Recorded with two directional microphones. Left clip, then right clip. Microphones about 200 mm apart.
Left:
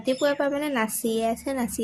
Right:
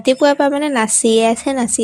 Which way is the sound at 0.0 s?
35° right (ahead or behind).